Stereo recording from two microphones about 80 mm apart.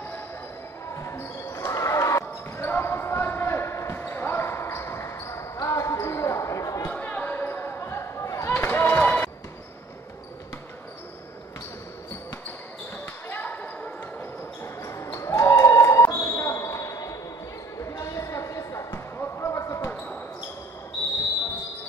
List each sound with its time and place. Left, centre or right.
0.9 s basketball bounce: left
6.9 s basketball bounce: centre; by 8.5 s left
8.5 s a sound: left
9.0 s basketball bounce: centre
13.0 s basketball bounce: left
14.6 s basketball bounce: left
17.7 s a sound: left
18.9 s basketball bounce: left
19.9 s basketball bounce: centre